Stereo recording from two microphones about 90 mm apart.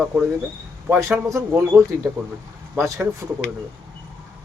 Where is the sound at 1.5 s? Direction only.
30° right (ahead or behind).